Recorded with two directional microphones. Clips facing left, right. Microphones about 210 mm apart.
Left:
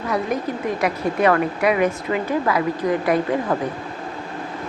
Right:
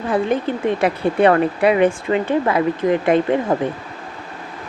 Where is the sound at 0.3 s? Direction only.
30° right (ahead or behind).